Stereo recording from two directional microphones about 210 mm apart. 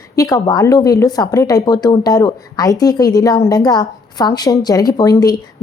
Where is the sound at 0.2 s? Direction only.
15° left (ahead or behind).